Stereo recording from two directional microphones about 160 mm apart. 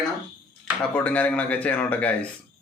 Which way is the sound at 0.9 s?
10° left (ahead or behind).